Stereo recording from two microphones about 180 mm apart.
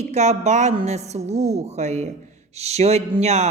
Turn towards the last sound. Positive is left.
turn(degrees=-35)  # may be behind; listen again after turning